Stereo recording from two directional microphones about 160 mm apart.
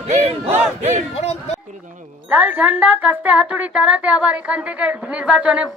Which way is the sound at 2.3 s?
10° right (ahead or behind).